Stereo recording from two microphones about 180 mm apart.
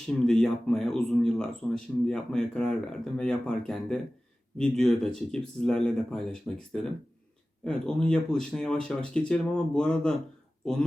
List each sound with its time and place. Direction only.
0.1 s speech: 5° left (ahead or behind)